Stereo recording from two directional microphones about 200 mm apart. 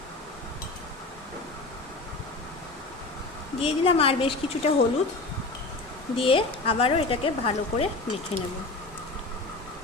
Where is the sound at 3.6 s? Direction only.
30° left (ahead or behind).